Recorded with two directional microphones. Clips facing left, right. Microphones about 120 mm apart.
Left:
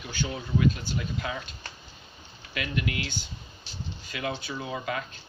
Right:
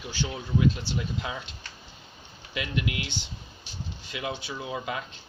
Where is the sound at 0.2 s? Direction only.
20° right (ahead or behind).